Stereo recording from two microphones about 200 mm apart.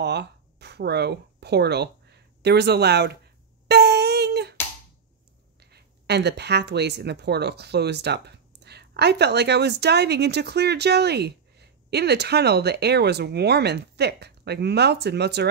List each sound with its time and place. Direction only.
0.0 s speech: 55° right (ahead or behind)
3.6 s a sound: 55° right (ahead or behind)
5.6 s speech: 55° right (ahead or behind)